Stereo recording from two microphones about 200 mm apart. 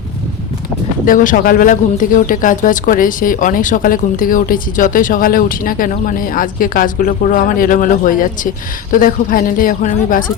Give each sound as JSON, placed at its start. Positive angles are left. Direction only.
{"t": 1.0, "sound": "speech", "side_deg": 40}